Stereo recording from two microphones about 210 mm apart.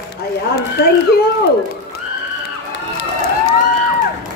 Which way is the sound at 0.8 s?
50° left (ahead or behind).